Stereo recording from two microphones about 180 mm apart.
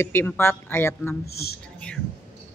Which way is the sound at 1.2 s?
60° left (ahead or behind).